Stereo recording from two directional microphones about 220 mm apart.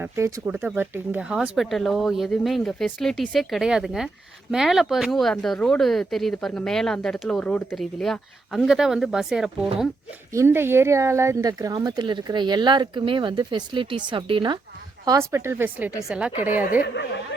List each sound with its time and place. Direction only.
0.0 s speech: 15° right (ahead or behind)
16.8 s speech: 50° left (ahead or behind)